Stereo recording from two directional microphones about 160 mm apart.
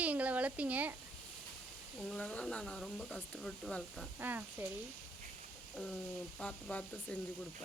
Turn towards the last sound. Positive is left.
turn(degrees=10)  # may be behind; listen again after turning